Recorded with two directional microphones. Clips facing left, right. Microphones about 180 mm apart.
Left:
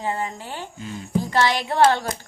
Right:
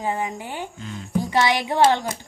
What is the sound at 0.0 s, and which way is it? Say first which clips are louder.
A woman's voice: right 1 dB; 15° right (ahead or behind).